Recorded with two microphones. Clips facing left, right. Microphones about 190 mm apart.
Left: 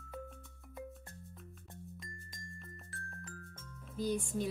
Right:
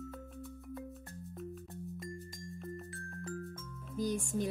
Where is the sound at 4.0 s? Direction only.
45° right (ahead or behind).